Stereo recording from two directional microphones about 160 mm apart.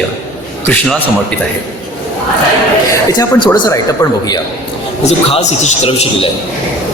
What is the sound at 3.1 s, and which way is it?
Speech, 20° left (ahead or behind).